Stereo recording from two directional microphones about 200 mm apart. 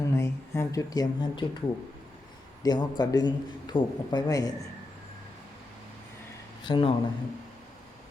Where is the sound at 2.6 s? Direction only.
20° left (ahead or behind).